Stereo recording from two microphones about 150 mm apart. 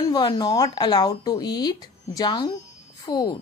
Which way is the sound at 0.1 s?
25° left (ahead or behind).